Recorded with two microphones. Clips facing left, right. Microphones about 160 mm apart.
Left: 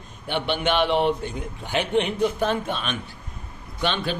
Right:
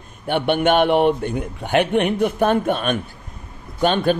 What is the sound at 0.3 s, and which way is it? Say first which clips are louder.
A man's voice: right 7 dB; 55° right (ahead or behind).